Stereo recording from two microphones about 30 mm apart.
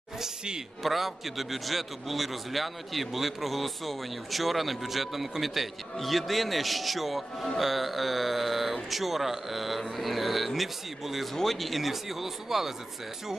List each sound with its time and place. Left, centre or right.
0.8 s a man's voice: centre